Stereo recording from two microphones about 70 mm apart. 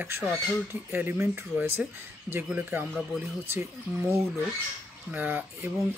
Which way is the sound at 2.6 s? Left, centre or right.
Right.